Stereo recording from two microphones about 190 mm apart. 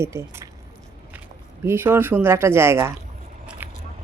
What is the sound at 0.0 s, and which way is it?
Speech, 15° right (ahead or behind).